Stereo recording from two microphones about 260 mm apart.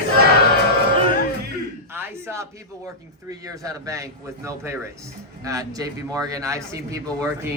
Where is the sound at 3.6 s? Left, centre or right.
Centre.